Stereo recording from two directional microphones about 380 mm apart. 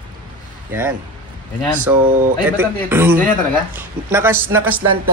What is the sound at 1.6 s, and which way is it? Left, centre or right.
Speech, centre.